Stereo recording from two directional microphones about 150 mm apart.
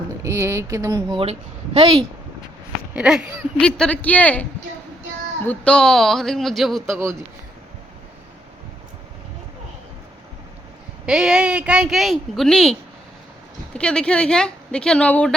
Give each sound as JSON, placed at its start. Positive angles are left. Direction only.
{"t": 0.2, "sound": "speech", "side_deg": -20}
{"t": 1.1, "sound": "a woman's voice", "side_deg": -40}
{"t": 2.9, "sound": "speech", "side_deg": -5}
{"t": 3.6, "sound": "speech", "side_deg": 5}
{"t": 5.5, "sound": "speech", "side_deg": 5}
{"t": 6.9, "sound": "speech", "side_deg": -20}
{"t": 11.0, "sound": "speech", "side_deg": -5}
{"t": 13.7, "sound": "speech", "side_deg": 5}